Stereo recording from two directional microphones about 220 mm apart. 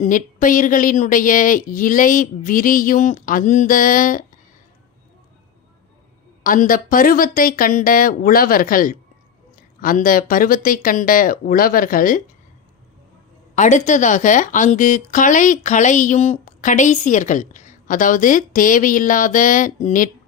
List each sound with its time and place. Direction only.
0.0 s speech: 35° left (ahead or behind)
6.4 s speech: 40° left (ahead or behind)
13.6 s speech: 35° left (ahead or behind)